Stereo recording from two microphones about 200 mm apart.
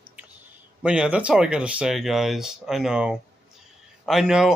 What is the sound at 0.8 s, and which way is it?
Speech, 5° right (ahead or behind).